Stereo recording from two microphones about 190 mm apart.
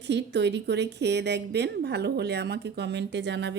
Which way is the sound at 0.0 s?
65° right (ahead or behind).